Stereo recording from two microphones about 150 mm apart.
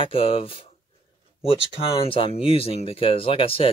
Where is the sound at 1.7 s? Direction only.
40° left (ahead or behind).